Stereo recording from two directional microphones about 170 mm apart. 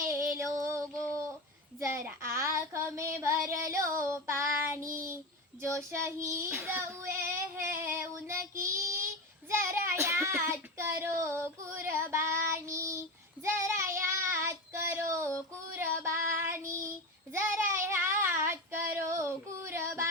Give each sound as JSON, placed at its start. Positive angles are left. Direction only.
{"t": 0.1, "sound": "music", "side_deg": -15}
{"t": 1.8, "sound": "child singing", "side_deg": -15}